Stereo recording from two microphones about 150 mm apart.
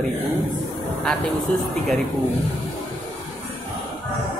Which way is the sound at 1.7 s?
Centre (ahead or behind).